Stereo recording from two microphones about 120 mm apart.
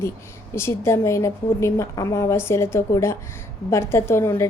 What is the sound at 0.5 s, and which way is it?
A woman's voice, 20° left (ahead or behind).